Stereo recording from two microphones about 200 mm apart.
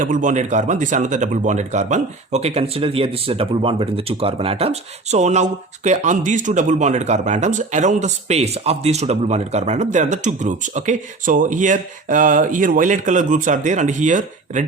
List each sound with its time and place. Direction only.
0.0 s speech: 40° right (ahead or behind)